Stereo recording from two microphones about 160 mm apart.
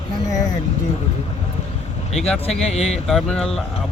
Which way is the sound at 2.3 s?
5° left (ahead or behind).